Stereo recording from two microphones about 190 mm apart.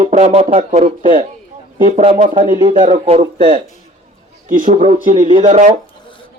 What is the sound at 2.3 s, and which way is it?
Music, 40° right (ahead or behind).